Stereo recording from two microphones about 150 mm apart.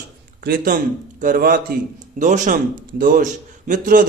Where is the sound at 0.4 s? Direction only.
70° right (ahead or behind).